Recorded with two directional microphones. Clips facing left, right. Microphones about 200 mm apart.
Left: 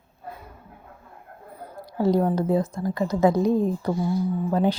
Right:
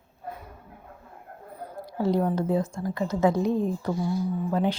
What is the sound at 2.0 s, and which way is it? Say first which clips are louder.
Speech: left 3 dB; 40° left (ahead or behind).